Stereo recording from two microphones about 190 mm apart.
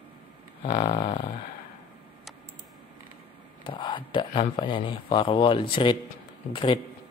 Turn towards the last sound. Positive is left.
turn(degrees=25)  # may be behind; listen again after turning